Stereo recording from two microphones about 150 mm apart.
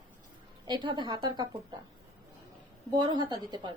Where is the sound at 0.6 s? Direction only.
30° right (ahead or behind).